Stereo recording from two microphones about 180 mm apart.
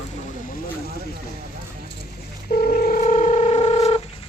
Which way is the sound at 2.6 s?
45° left (ahead or behind).